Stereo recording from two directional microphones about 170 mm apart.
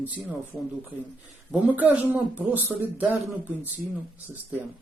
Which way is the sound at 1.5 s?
10° right (ahead or behind).